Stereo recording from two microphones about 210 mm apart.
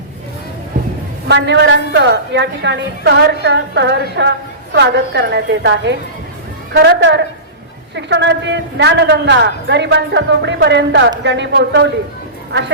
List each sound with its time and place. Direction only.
1.3 s a woman's voice: 55° right (ahead or behind)